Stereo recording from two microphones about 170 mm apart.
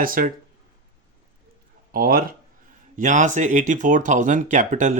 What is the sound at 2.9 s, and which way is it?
Speech, 50° right (ahead or behind).